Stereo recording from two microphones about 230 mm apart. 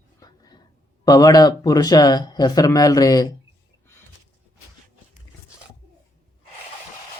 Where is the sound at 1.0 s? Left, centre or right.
Centre.